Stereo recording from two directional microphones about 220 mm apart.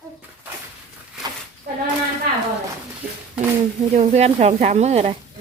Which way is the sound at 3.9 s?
30° right (ahead or behind).